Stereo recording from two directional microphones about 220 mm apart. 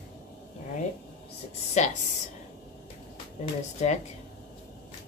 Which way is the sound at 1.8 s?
30° left (ahead or behind).